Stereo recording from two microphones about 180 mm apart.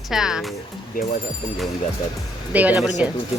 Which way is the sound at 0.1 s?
Centre (ahead or behind).